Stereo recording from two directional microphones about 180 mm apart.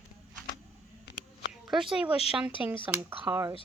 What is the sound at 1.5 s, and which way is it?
A woman's voice, centre (ahead or behind).